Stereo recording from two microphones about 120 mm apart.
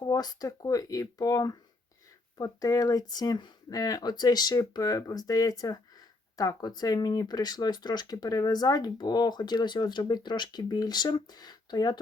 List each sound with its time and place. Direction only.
0.0 s speech: 30° left (ahead or behind)